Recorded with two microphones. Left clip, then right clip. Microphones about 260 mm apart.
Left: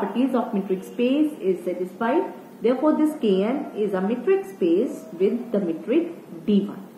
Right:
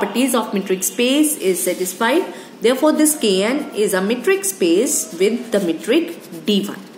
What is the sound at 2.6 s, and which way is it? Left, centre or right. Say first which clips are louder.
A woman's voice: right 6 dB; right.